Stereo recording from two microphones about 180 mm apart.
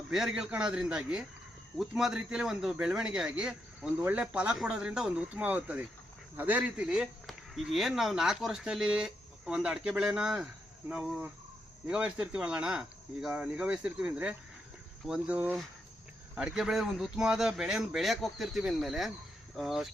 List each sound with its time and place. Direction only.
0.1 s speech: 5° right (ahead or behind)